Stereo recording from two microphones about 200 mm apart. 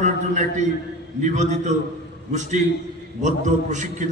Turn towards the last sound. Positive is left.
turn(degrees=-40)  # may be behind; listen again after turning